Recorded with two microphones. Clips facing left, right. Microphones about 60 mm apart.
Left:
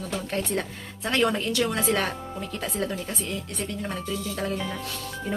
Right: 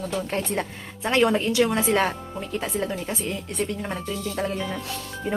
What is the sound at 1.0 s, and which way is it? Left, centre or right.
Speech, right.